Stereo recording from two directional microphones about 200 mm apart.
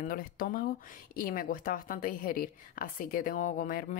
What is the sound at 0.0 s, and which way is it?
Speech, 45° left (ahead or behind).